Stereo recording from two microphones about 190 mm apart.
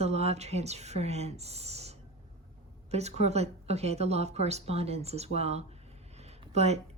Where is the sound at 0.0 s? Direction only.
35° right (ahead or behind).